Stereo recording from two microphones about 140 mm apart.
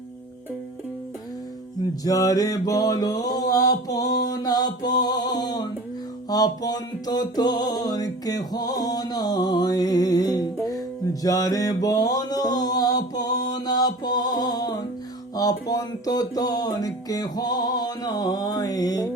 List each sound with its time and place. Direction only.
2.0 s music: 25° left (ahead or behind)